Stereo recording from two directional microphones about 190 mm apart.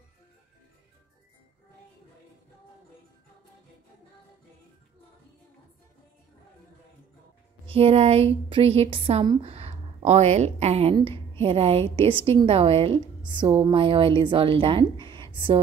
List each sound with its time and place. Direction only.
7.6 s a woman's voice: 30° right (ahead or behind)